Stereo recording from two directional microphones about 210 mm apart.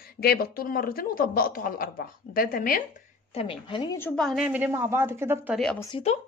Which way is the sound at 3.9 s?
5° left (ahead or behind).